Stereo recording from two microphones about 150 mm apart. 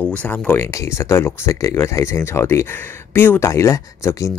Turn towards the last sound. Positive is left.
turn(degrees=20)  # may be behind; listen again after turning